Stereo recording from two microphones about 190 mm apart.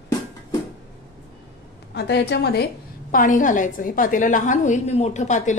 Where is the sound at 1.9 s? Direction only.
60° left (ahead or behind).